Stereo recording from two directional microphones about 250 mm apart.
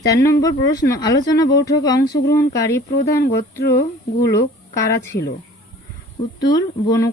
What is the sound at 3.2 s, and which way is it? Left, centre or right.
Speech, left.